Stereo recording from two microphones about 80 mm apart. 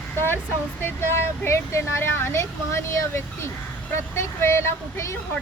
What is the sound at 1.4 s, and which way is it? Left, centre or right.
Speech, left.